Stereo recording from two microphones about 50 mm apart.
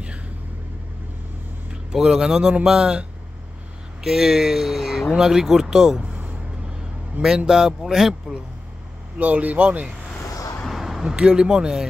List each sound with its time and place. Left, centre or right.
1.7 s a man's voice: centre
6.0 s vehicle: right
6.8 s speech: centre
9.2 s speech: right
10.7 s a sound: centre
11.1 s speech: centre